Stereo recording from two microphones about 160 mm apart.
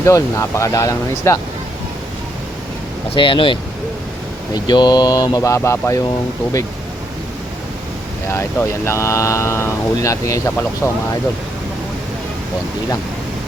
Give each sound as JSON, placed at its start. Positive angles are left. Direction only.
{"t": 0.0, "sound": "speech", "side_deg": 20}
{"t": 3.2, "sound": "speech", "side_deg": 30}
{"t": 8.3, "sound": "speech", "side_deg": 15}